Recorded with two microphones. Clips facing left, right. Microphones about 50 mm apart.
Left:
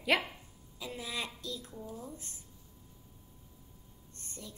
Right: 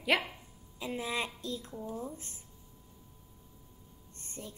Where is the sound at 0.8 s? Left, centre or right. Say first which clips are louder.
Right 4 dB; right.